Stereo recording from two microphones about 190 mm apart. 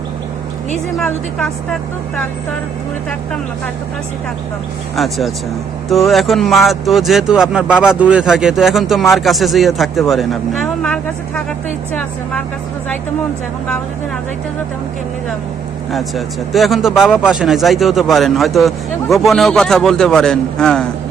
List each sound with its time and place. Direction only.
4.9 s speech: centre (ahead or behind)
15.9 s speech: centre (ahead or behind)